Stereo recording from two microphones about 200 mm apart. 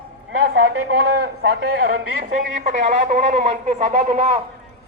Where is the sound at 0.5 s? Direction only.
55° right (ahead or behind).